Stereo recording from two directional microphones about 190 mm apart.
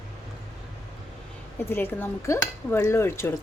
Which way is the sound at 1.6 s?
10° left (ahead or behind).